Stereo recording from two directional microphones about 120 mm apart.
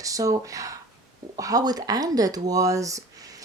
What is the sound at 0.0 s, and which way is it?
Speech, 30° right (ahead or behind).